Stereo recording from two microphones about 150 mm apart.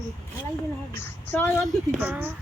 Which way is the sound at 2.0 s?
10° right (ahead or behind).